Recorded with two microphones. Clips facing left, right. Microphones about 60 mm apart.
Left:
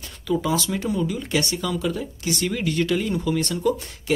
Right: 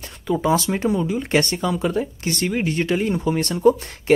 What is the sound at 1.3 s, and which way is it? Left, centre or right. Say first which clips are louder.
Speech: right 6 dB; right.